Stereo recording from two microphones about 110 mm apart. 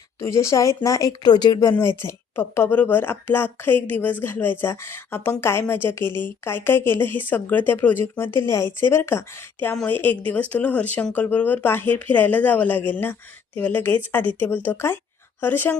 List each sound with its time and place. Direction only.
0.2 s a woman's voice: 25° left (ahead or behind)
2.0 s a woman's voice: 20° left (ahead or behind)